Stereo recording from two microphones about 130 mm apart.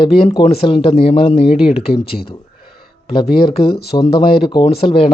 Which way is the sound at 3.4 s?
40° left (ahead or behind).